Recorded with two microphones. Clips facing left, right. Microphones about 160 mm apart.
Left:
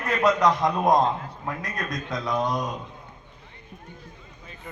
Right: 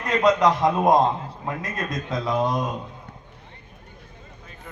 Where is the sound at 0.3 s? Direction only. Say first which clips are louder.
Right 2 dB; centre (ahead or behind).